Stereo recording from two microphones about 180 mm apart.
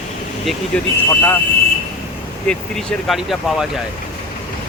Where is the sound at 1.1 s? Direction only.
10° left (ahead or behind).